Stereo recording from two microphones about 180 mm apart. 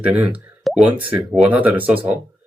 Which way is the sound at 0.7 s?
Centre (ahead or behind).